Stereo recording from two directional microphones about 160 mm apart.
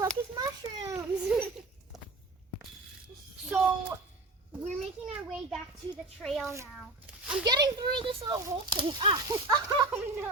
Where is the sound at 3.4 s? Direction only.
10° right (ahead or behind).